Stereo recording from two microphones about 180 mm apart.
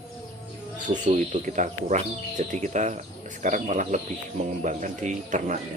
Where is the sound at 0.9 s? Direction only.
45° right (ahead or behind).